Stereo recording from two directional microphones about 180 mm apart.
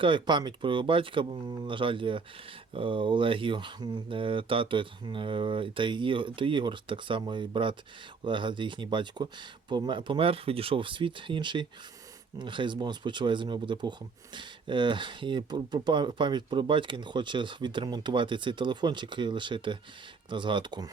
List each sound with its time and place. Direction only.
0.0 s speech: 25° right (ahead or behind)